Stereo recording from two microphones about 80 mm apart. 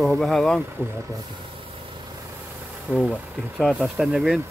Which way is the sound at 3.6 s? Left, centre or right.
Centre.